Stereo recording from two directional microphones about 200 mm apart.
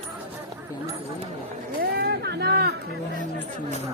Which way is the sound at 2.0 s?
55° right (ahead or behind).